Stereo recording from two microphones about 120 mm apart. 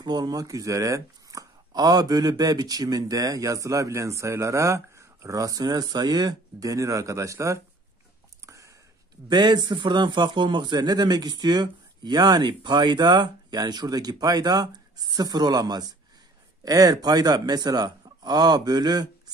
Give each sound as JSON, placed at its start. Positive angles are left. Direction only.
{"t": 0.0, "sound": "speech", "side_deg": -35}
{"t": 8.5, "sound": "a sound", "side_deg": -25}
{"t": 9.3, "sound": "speech", "side_deg": -40}